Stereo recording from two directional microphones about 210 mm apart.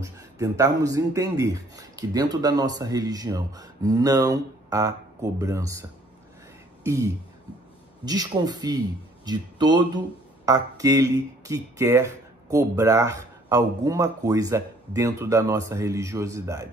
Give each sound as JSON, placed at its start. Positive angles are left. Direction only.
{"t": 0.0, "sound": "speech", "side_deg": -15}
{"t": 6.8, "sound": "a sound", "side_deg": -15}
{"t": 8.0, "sound": "speech", "side_deg": -20}